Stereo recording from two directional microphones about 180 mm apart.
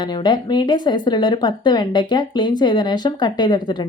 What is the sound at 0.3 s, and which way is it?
Speech, 25° left (ahead or behind).